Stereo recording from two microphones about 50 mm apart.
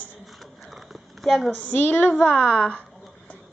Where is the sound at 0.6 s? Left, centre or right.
Centre.